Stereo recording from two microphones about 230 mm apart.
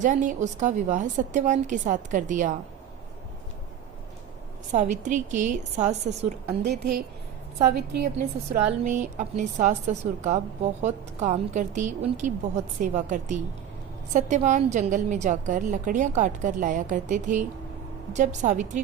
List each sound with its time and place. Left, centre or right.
0.0 s a woman's voice: right
4.7 s a woman's voice: right
6.6 s a woman's voice: right
8.6 s a woman's voice: right